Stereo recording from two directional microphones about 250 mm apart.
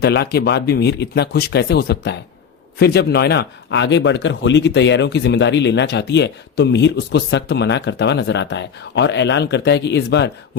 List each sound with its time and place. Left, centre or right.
0.0 s speech: left